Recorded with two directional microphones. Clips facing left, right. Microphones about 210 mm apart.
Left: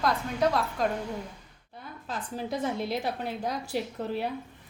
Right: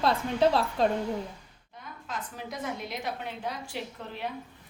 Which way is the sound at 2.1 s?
35° left (ahead or behind).